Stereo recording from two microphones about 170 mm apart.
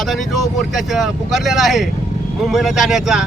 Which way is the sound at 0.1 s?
Centre (ahead or behind).